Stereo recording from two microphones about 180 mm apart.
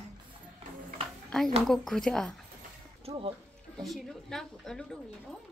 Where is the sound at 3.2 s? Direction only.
30° right (ahead or behind).